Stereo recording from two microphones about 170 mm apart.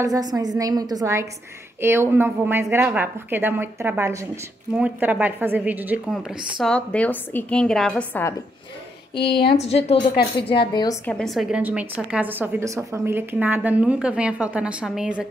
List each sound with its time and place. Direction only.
0.0 s a woman's voice: 20° right (ahead or behind)
6.6 s a woman's voice: 5° left (ahead or behind)
9.1 s a woman's voice: 30° left (ahead or behind)
10.7 s a woman's voice: 25° left (ahead or behind)
11.1 s a woman's voice: 5° left (ahead or behind)
11.6 s a woman's voice: 10° right (ahead or behind)